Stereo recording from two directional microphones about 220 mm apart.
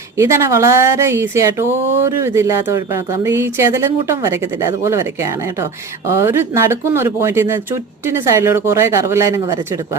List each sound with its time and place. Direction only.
0.2 s speech: 15° right (ahead or behind)